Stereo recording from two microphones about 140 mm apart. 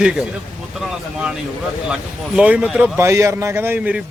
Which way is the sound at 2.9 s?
20° right (ahead or behind).